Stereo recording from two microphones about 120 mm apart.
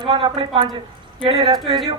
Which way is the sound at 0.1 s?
45° right (ahead or behind).